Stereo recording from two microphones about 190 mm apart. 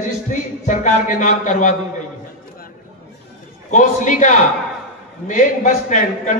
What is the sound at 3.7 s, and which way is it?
Speech, 40° left (ahead or behind).